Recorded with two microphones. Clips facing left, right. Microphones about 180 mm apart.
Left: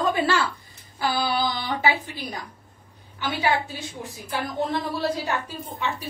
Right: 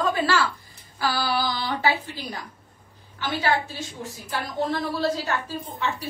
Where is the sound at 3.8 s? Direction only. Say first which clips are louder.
Right 1 dB; 15° left (ahead or behind).